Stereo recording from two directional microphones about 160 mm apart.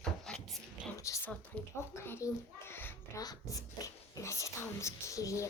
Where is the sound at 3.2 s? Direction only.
25° left (ahead or behind).